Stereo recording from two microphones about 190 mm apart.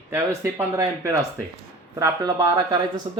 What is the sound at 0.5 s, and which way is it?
Speech, 20° right (ahead or behind).